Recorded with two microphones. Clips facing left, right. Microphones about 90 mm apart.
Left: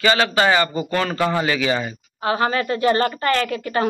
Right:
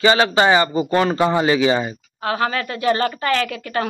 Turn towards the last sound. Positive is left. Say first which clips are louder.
# left 2 dB
turn(degrees=5)  # may be behind; listen again after turning